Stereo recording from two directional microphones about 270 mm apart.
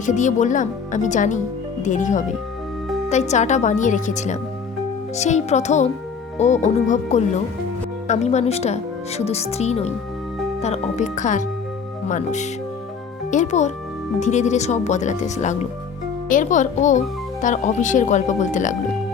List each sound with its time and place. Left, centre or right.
0.0 s speech: left